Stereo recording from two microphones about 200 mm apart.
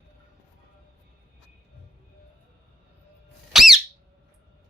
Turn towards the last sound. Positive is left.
turn(degrees=0)  # may be behind; listen again after turning